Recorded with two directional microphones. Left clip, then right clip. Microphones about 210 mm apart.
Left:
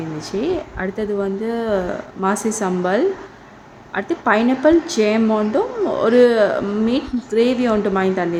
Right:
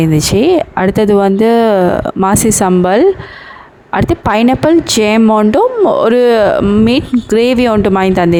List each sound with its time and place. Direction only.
0.2 s speech: 50° right (ahead or behind)